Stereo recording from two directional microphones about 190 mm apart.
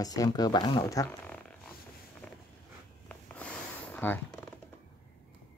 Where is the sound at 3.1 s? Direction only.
5° left (ahead or behind).